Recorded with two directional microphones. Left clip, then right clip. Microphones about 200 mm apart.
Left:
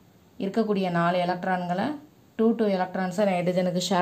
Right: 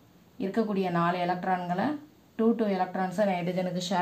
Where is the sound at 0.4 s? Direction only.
40° left (ahead or behind).